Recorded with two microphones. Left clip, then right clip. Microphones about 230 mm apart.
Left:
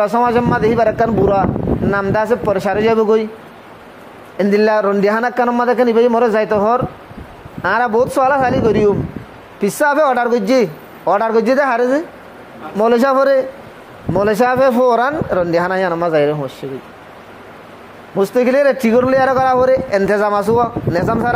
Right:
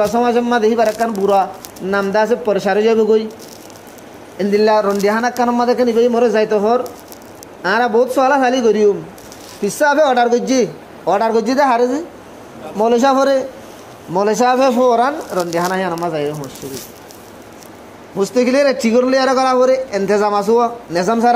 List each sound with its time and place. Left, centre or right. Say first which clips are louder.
0.0 s a man's voice: left 1 dB; left
4.4 s a man's voice: even; left
18.1 s a man's voice: left 1 dB; left